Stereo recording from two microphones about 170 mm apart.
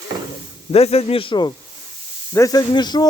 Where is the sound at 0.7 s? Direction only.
35° left (ahead or behind).